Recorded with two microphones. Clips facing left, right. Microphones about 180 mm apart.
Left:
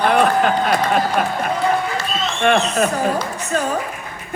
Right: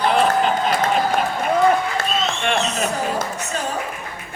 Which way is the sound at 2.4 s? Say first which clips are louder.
Left 5 dB; 50° left (ahead or behind).